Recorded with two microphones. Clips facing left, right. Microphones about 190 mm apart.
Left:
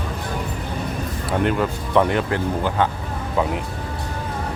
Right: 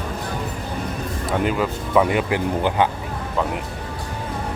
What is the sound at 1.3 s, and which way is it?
Speech, 5° right (ahead or behind).